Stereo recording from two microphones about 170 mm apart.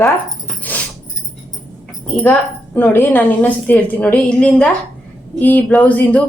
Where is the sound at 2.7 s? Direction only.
10° left (ahead or behind).